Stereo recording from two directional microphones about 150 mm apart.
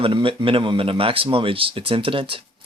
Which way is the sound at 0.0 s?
35° right (ahead or behind).